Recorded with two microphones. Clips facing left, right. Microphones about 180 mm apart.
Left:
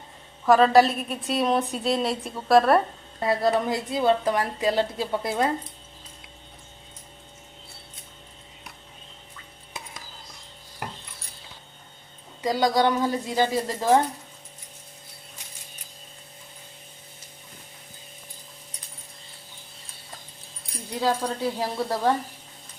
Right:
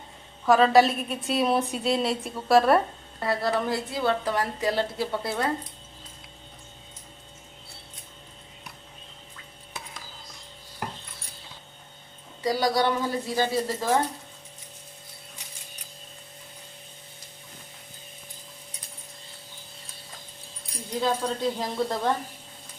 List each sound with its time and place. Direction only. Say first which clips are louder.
0.4 s a woman's voice: left 1 dB; centre (ahead or behind)
3.2 s a woman's voice: left 3 dB; 20° left (ahead or behind)
12.4 s a woman's voice: left 2 dB; 20° left (ahead or behind)
21.0 s a woman's voice: left 1 dB; 10° left (ahead or behind)